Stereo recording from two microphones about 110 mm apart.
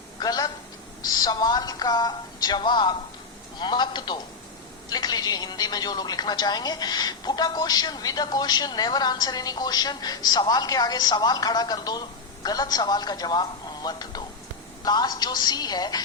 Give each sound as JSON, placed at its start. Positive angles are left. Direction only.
{"t": 0.2, "sound": "a man's voice", "side_deg": 35}